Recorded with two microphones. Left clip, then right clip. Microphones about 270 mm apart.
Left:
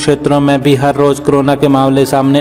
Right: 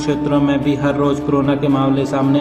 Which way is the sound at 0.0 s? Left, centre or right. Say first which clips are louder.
Left 6 dB; left.